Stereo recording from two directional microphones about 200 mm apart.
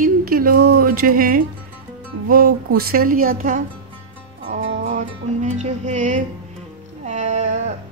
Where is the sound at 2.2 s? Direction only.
45° right (ahead or behind).